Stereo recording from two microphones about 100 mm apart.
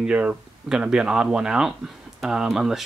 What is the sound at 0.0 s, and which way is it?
Speech, 10° right (ahead or behind).